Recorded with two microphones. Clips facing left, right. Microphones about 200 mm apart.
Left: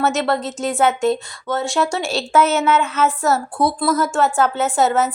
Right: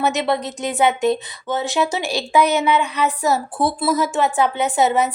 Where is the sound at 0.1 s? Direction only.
Centre (ahead or behind).